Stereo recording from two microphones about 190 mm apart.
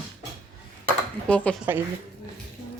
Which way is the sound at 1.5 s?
5° left (ahead or behind).